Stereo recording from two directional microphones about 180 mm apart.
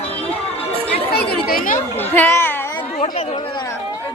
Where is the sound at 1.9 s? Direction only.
10° left (ahead or behind).